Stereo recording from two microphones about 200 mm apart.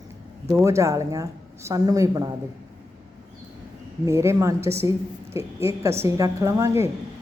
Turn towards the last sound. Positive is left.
turn(degrees=-15)  # may be behind; listen again after turning